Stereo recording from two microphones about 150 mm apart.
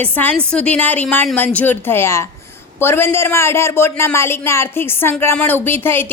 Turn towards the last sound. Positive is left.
turn(degrees=15)  # may be behind; listen again after turning